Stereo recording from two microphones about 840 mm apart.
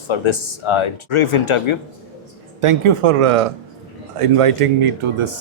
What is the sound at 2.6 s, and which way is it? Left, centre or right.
Speech, right.